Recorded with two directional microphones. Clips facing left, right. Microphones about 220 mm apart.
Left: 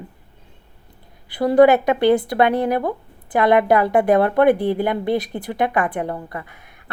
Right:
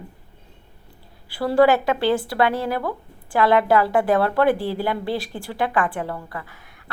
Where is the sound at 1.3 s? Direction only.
20° left (ahead or behind).